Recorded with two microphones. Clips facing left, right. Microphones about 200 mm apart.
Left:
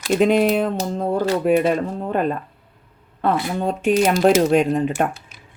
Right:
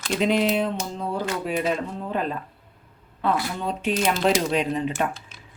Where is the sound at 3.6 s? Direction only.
50° left (ahead or behind).